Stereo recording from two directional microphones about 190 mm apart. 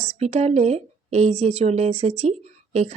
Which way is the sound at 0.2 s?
35° right (ahead or behind).